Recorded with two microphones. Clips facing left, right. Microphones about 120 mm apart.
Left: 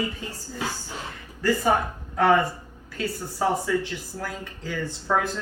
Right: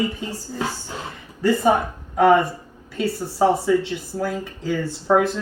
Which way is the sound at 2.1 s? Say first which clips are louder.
Right 5 dB; 15° right (ahead or behind).